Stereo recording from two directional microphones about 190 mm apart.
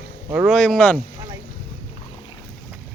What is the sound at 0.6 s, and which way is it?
Speech, 5° left (ahead or behind).